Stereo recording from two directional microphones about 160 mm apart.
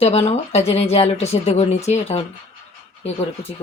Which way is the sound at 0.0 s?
40° left (ahead or behind).